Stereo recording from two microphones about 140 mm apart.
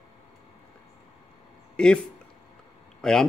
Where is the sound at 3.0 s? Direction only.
5° left (ahead or behind).